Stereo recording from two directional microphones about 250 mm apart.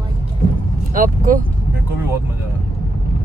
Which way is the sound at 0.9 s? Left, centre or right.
Right.